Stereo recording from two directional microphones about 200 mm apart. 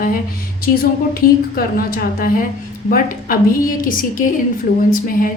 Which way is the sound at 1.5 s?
45° left (ahead or behind).